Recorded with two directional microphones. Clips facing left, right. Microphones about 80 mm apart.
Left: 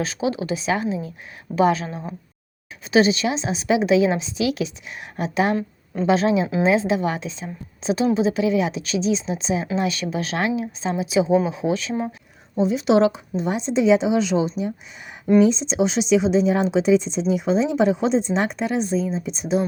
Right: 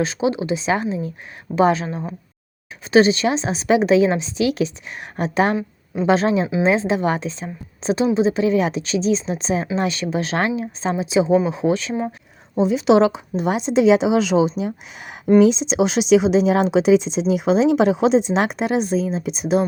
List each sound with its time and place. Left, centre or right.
0.0 s a woman's voice: right
9.7 s a woman's voice: right
12.6 s a woman's voice: right
13.3 s speech: right